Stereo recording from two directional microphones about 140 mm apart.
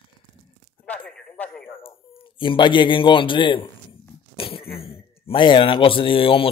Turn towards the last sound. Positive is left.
turn(degrees=40)  # may be behind; listen again after turning